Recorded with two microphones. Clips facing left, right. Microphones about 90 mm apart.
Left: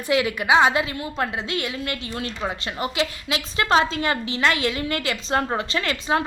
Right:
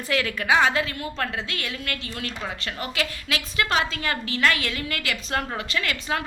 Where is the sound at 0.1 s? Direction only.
20° left (ahead or behind).